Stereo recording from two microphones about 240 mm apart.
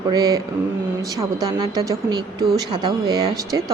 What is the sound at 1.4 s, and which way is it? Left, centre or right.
Speech, centre.